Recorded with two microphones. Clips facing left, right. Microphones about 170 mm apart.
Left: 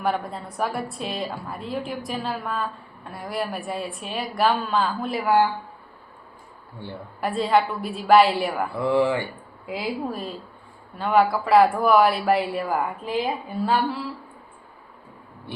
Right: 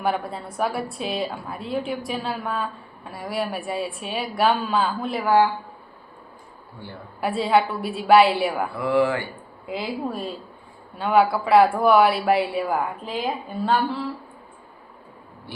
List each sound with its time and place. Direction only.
0.0 s a woman's voice: centre (ahead or behind)
7.2 s a woman's voice: centre (ahead or behind)
8.8 s speech: 20° left (ahead or behind)
9.6 s a woman's voice: centre (ahead or behind)